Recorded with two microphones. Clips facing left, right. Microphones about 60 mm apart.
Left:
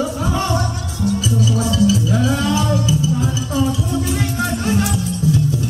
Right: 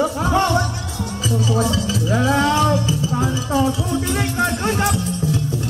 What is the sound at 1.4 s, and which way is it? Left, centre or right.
Music, right.